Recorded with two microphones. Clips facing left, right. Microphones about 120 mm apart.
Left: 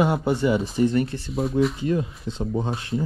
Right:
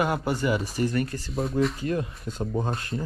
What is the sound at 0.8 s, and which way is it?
Speech, 25° left (ahead or behind).